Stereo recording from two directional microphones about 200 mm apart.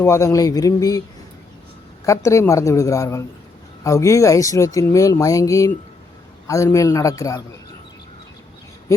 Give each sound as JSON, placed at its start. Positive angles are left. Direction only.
{"t": 0.0, "sound": "speech", "side_deg": 15}
{"t": 2.0, "sound": "speech", "side_deg": 15}